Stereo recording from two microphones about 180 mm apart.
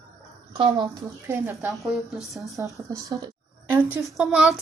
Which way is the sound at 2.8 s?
15° right (ahead or behind).